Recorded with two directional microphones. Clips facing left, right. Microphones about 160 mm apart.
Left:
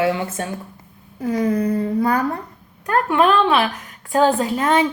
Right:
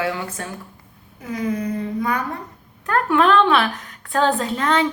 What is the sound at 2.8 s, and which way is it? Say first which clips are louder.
A woman's voice: left 1 dB; 15° left (ahead or behind).